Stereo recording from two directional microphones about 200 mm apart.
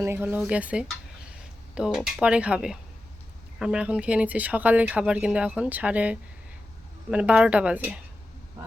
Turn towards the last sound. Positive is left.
turn(degrees=-5)  # may be behind; listen again after turning